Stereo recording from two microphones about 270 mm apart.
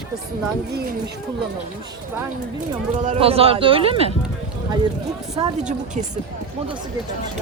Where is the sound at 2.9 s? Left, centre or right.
Right.